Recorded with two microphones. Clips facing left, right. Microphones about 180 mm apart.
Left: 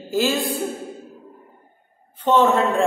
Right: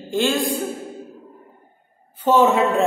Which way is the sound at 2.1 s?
10° right (ahead or behind).